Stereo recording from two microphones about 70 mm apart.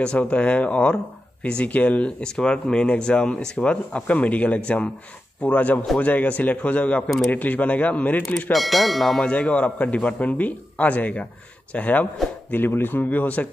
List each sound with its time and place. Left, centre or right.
0.0 s a man's voice: centre
8.5 s speech: centre
9.2 s a man's voice: centre